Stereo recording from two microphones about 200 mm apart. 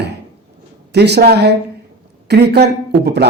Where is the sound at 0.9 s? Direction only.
55° right (ahead or behind).